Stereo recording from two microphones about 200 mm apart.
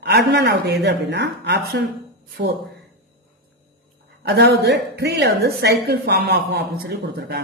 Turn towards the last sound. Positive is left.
turn(degrees=-50)  # may be behind; listen again after turning